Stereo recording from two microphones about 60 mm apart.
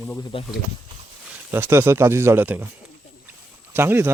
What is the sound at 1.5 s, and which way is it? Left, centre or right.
Speech, right.